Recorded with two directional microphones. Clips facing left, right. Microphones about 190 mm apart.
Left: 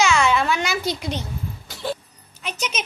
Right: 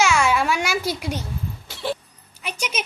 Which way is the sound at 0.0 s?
10° right (ahead or behind).